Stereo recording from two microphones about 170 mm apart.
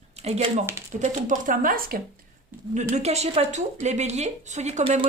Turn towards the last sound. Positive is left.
turn(degrees=-40)  # may be behind; listen again after turning